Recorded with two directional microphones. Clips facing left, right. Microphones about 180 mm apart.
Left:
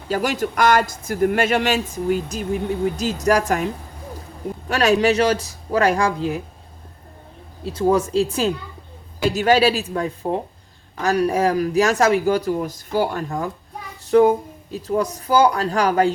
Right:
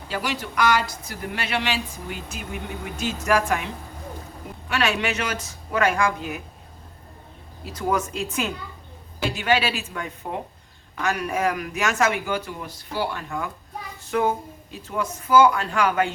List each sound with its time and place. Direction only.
0.1 s speech: 45° left (ahead or behind)
4.7 s a man's voice: 40° left (ahead or behind)
7.6 s a man's voice: 30° left (ahead or behind)